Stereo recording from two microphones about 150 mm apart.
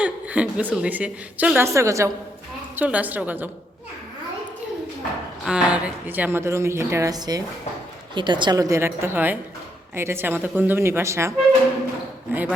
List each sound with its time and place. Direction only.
0.0 s a woman's voice: 10° right (ahead or behind)
5.5 s a woman's voice: 5° right (ahead or behind)